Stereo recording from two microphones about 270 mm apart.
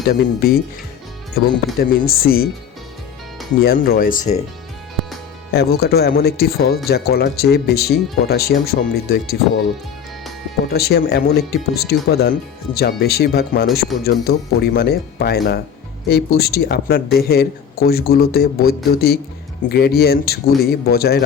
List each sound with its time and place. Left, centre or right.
0.1 s speech: left
1.8 s speech: left
3.6 s speech: left
5.5 s speech: left
10.7 s speech: left